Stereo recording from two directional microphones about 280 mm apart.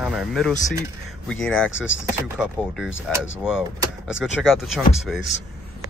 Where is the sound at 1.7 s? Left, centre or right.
Left.